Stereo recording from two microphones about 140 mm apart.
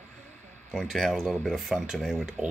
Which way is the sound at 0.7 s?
Centre (ahead or behind).